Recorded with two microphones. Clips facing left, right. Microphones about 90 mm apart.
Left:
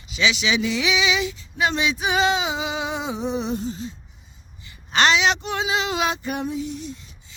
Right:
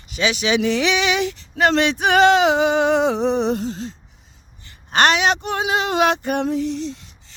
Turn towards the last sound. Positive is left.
turn(degrees=-90)